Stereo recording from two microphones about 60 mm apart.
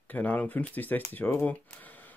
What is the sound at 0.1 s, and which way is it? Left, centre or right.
Speech, left.